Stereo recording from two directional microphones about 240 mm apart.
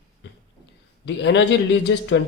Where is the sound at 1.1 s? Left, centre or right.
Left.